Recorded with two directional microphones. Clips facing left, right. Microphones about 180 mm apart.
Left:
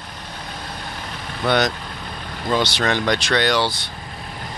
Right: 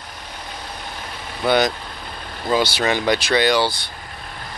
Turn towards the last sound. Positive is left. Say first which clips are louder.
# right 2 dB
turn(degrees=0)  # may be behind; listen again after turning